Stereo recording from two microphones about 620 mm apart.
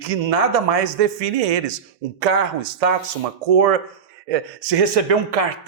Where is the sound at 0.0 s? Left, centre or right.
Right.